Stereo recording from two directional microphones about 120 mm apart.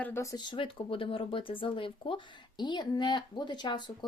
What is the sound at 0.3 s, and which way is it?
Speech, 45° left (ahead or behind).